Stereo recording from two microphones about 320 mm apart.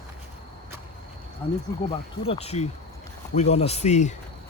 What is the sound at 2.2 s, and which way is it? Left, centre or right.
Speech, centre.